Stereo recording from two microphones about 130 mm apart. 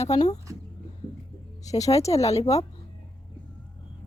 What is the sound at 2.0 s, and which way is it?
Speech, 55° left (ahead or behind).